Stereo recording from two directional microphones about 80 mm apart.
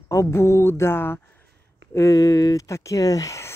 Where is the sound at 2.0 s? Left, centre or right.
Left.